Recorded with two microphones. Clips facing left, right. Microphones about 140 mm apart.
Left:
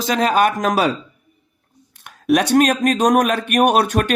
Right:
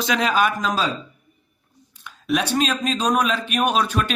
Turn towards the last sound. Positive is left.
turn(degrees=60)  # may be behind; listen again after turning